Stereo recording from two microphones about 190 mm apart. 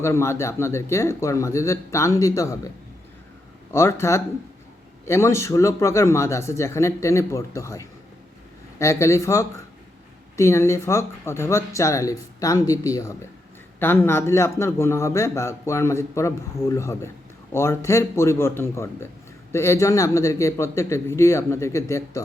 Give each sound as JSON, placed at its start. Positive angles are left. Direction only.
{"t": 0.0, "sound": "a man's voice", "side_deg": 15}
{"t": 3.7, "sound": "a man's voice", "side_deg": 15}